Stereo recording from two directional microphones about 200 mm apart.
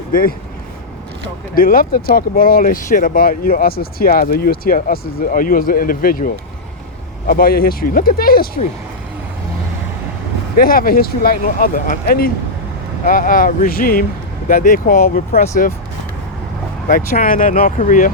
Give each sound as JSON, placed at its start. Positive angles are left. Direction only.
{"t": 0.1, "sound": "speech", "side_deg": 45}
{"t": 1.5, "sound": "speech", "side_deg": 45}
{"t": 10.6, "sound": "speech", "side_deg": 45}
{"t": 16.9, "sound": "speech", "side_deg": 45}